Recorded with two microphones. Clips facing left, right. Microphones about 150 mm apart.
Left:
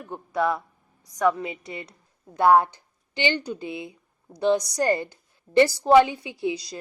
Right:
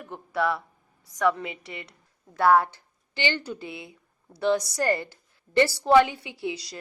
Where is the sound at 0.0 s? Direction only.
20° left (ahead or behind).